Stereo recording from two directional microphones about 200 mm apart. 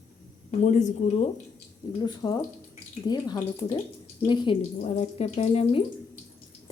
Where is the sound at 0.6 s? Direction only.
35° left (ahead or behind).